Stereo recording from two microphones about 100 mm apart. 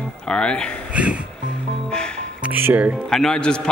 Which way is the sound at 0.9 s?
15° right (ahead or behind).